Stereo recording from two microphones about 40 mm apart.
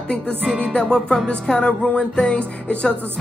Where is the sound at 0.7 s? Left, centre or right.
Left.